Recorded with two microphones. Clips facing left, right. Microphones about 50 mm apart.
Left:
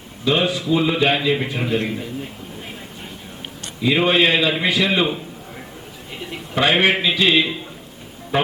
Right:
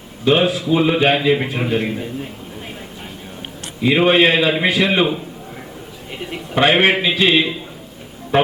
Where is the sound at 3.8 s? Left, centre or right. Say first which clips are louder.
Right 3 dB; centre.